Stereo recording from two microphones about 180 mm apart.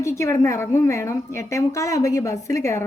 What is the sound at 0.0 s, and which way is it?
A woman's voice, 15° left (ahead or behind).